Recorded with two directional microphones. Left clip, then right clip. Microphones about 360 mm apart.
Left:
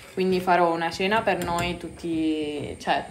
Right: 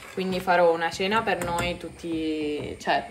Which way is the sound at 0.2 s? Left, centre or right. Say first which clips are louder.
Left 1 dB; centre.